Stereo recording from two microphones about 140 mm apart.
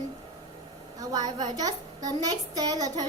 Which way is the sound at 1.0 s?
30° right (ahead or behind).